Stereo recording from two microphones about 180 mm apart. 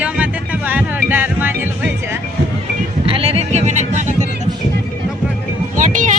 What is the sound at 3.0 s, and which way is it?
Music, 30° right (ahead or behind).